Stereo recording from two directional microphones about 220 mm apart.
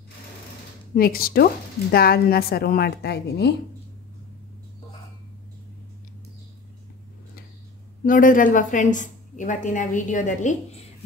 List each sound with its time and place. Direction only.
0.9 s a woman's voice: 40° left (ahead or behind)
8.0 s a woman's voice: 40° left (ahead or behind)